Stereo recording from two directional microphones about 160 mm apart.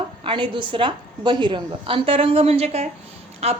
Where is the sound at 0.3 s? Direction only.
30° right (ahead or behind).